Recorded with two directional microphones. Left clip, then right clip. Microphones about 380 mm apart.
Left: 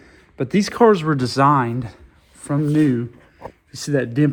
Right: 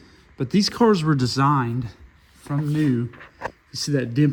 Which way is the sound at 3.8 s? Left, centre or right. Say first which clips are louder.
Left 3 dB; centre.